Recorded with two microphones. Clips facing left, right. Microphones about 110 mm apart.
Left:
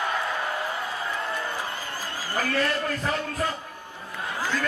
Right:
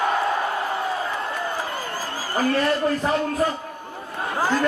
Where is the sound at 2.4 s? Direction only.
35° right (ahead or behind).